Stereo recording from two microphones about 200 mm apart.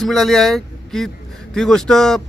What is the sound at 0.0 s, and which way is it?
Speech, centre (ahead or behind).